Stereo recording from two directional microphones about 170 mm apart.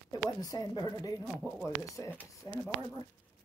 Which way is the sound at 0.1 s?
20° left (ahead or behind).